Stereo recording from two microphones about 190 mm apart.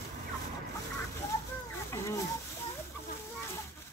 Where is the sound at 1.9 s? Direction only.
15° left (ahead or behind).